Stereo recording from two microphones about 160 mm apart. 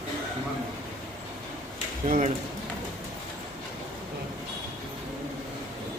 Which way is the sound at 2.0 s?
55° right (ahead or behind).